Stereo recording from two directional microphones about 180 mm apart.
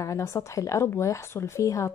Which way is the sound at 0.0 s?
15° left (ahead or behind).